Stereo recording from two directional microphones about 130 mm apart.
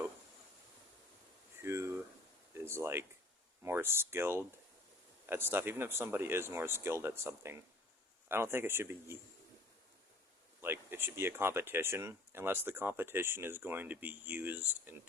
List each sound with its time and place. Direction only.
1.6 s a sound: 20° right (ahead or behind)
2.6 s speech: 20° right (ahead or behind)
10.6 s speech: 15° right (ahead or behind)